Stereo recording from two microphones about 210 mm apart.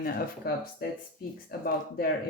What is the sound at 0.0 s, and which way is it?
Speech, 45° left (ahead or behind).